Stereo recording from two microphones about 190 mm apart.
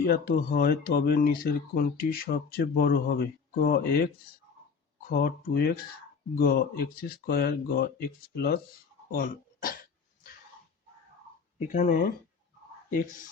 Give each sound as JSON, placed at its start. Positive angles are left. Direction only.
{"t": 0.0, "sound": "speech", "side_deg": 50}
{"t": 11.7, "sound": "speech", "side_deg": 45}